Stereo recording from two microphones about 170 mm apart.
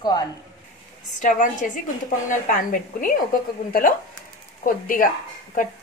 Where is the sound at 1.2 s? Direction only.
50° left (ahead or behind).